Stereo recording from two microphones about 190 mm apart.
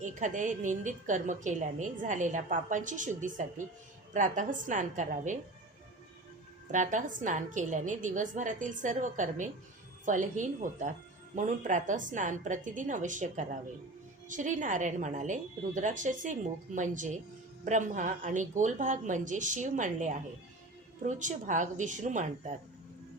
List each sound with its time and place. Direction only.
0.0 s a woman's voice: 40° right (ahead or behind)
6.7 s a woman's voice: 40° right (ahead or behind)